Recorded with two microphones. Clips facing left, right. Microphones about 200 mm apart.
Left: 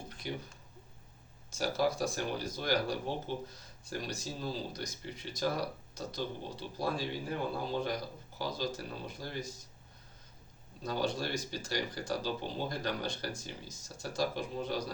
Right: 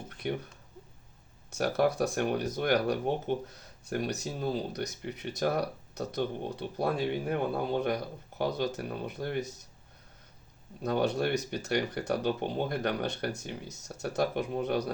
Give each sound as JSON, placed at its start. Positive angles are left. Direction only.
{"t": 0.2, "sound": "speech", "side_deg": -60}
{"t": 1.5, "sound": "speech", "side_deg": -60}
{"t": 10.8, "sound": "speech", "side_deg": -65}